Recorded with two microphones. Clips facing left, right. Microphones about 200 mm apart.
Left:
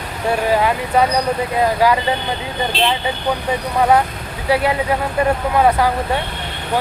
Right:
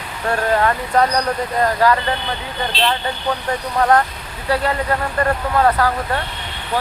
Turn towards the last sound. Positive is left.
turn(degrees=10)  # may be behind; listen again after turning